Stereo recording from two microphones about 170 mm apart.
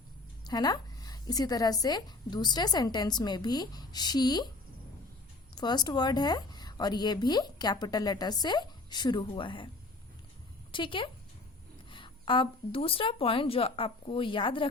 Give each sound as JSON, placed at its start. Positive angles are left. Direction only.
{"t": 0.4, "sound": "a woman's voice", "side_deg": 25}
{"t": 5.5, "sound": "a woman's voice", "side_deg": 25}
{"t": 10.7, "sound": "speech", "side_deg": 30}